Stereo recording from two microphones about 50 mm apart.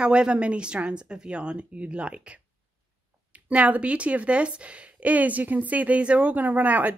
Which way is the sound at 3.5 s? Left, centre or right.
Right.